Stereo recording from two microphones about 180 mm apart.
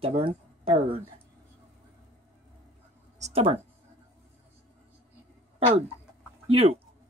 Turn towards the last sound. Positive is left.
turn(degrees=-35)  # may be behind; listen again after turning